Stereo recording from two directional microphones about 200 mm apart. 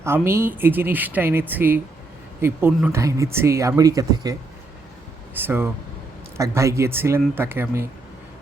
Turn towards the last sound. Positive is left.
turn(degrees=-10)  # may be behind; listen again after turning